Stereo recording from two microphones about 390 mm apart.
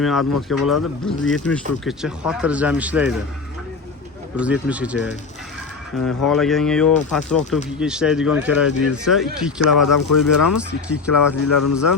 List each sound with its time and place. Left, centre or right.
0.0 s speech: centre
4.4 s speech: centre
9.8 s speech: left
10.8 s speech: centre
11.1 s speech: left